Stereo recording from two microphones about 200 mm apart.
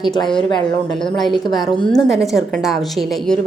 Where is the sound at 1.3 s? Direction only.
20° left (ahead or behind).